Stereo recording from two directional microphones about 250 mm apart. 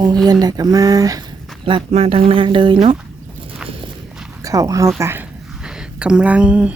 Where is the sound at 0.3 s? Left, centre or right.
Centre.